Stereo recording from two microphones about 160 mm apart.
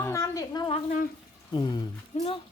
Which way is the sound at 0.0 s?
20° left (ahead or behind).